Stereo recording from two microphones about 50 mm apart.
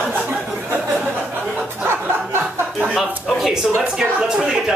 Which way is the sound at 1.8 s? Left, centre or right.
Right.